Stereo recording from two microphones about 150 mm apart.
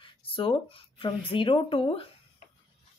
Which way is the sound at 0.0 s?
35° left (ahead or behind).